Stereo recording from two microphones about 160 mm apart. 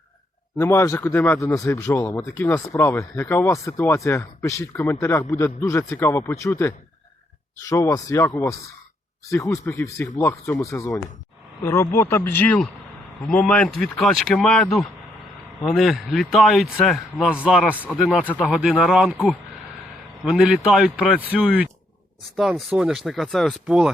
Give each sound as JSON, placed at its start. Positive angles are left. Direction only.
{"t": 0.6, "sound": "a man's voice", "side_deg": 15}
{"t": 18.3, "sound": "a man's voice", "side_deg": 10}
{"t": 18.5, "sound": "speech", "side_deg": 0}